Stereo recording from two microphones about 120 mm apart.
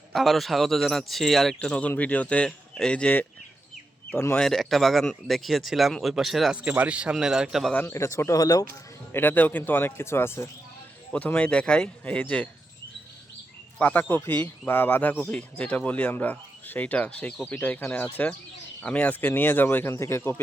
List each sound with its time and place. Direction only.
0.1 s speech: centre (ahead or behind); by 4.4 s 20° left (ahead or behind)
4.4 s speech: centre (ahead or behind)
7.7 s speech: 15° left (ahead or behind)
9.1 s speech: 15° left (ahead or behind)
13.7 s speech: 10° left (ahead or behind)